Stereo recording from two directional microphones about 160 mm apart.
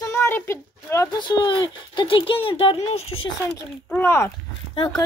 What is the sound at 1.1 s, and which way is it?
Speech, 30° left (ahead or behind).